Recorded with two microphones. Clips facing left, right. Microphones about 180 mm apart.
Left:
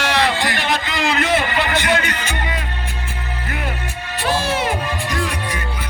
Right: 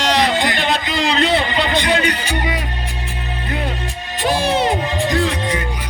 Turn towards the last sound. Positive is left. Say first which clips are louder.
# right 5 dB
turn(degrees=-20)  # may be behind; listen again after turning